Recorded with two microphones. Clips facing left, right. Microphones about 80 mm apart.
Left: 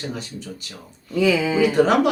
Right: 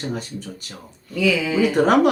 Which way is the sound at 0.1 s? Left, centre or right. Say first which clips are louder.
Right 3 dB; right.